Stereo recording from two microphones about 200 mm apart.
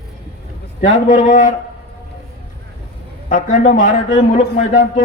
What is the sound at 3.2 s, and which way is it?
A man's voice, 40° left (ahead or behind).